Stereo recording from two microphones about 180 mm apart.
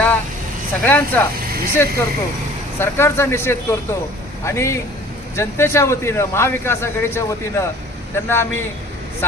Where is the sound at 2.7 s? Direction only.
15° left (ahead or behind).